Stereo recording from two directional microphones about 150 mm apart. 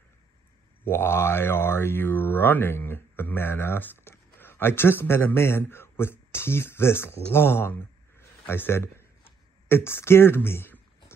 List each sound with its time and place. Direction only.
0.8 s speech: 15° left (ahead or behind)